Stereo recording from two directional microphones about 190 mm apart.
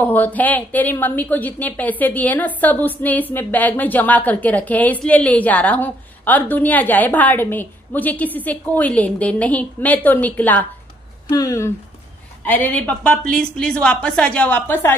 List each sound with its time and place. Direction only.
0.0 s a woman's voice: 10° left (ahead or behind)